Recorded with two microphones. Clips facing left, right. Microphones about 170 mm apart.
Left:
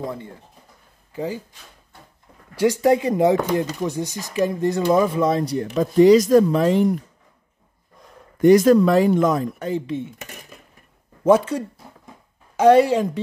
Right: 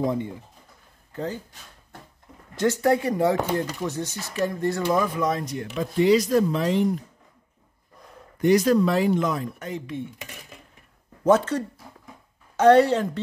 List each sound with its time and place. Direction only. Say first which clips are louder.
0.0 s speech: right 5 dB; 20° right (ahead or behind)
1.1 s speech: left 3 dB; 10° left (ahead or behind)
2.5 s speech: left 4 dB; 10° left (ahead or behind); by 6.9 s 50° left (ahead or behind)
8.4 s speech: left 6 dB; 50° left (ahead or behind)
9.6 s speech: left 7 dB; 30° left (ahead or behind)
11.2 s speech: left 3 dB; 10° left (ahead or behind)